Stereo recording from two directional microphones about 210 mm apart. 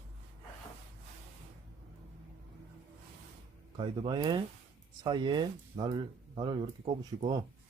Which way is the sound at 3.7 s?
25° right (ahead or behind).